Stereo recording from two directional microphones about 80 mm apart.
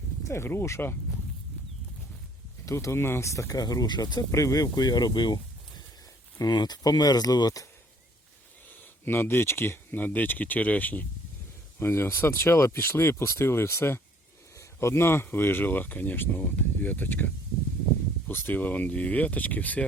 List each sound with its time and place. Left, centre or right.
0.3 s speech: left
2.6 s speech: left
4.3 s speech: left
9.0 s speech: left